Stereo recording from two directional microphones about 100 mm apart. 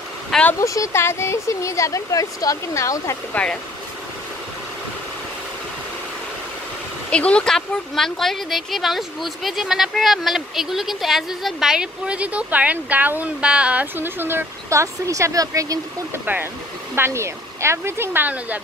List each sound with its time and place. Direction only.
0.6 s speech: 35° left (ahead or behind)
7.1 s speech: 10° left (ahead or behind); by 15.8 s 35° right (ahead or behind)
16.9 s speech: 25° right (ahead or behind)